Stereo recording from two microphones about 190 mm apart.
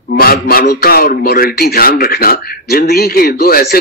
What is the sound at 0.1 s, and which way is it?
A man's voice, 50° left (ahead or behind).